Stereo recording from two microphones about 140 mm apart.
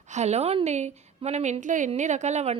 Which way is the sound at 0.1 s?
55° right (ahead or behind).